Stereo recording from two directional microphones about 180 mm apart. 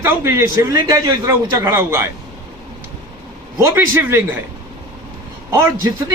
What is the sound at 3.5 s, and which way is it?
Speech, 15° right (ahead or behind).